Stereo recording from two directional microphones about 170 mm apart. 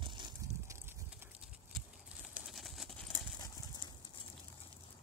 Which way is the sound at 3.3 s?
25° left (ahead or behind).